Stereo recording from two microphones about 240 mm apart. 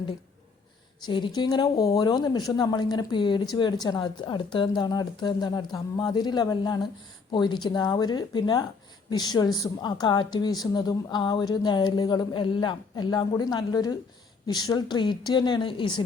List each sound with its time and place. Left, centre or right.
1.0 s a woman's voice: centre